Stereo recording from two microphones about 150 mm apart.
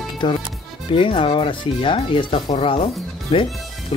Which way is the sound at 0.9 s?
35° left (ahead or behind).